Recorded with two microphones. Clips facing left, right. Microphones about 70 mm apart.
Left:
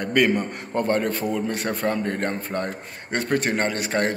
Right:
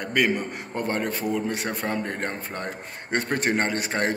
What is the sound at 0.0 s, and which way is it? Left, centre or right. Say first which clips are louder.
A man's voice: left 3 dB; centre.